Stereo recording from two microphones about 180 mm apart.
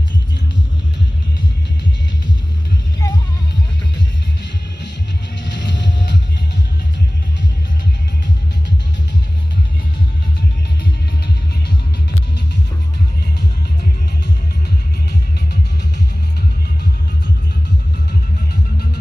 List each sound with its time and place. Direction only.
3.0 s music: 15° left (ahead or behind)
5.4 s music: 80° left